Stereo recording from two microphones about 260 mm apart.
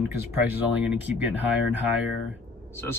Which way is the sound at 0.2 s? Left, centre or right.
Centre.